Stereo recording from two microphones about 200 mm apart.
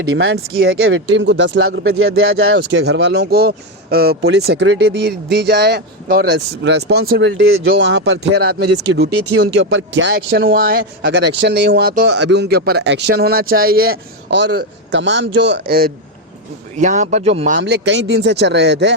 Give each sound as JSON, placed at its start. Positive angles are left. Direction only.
{"t": 0.2, "sound": "speech", "side_deg": -80}
{"t": 2.0, "sound": "speech", "side_deg": -90}
{"t": 4.9, "sound": "speech", "side_deg": -50}
{"t": 7.3, "sound": "speech", "side_deg": -80}
{"t": 16.7, "sound": "speech", "side_deg": -40}
{"t": 17.6, "sound": "speech", "side_deg": -60}